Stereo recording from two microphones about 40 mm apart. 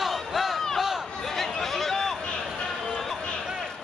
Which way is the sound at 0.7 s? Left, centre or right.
Centre.